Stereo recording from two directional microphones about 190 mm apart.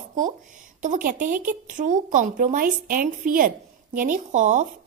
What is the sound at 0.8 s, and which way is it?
A woman's voice, 45° right (ahead or behind).